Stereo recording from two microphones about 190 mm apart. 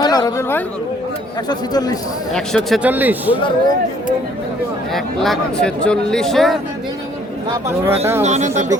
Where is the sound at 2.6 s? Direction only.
5° right (ahead or behind).